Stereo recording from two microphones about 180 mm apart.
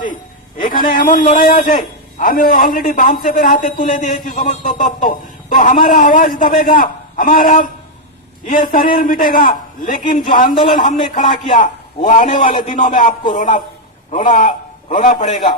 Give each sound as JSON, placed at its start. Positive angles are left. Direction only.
{"t": 0.6, "sound": "a man's voice", "side_deg": 50}